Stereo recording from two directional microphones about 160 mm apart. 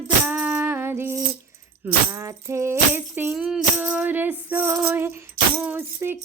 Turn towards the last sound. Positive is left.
turn(degrees=-15)  # may be behind; listen again after turning